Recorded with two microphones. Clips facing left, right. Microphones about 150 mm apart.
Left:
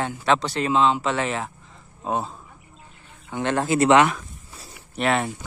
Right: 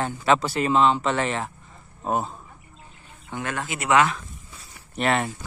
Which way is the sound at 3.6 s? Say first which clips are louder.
Left 11 dB; 35° left (ahead or behind).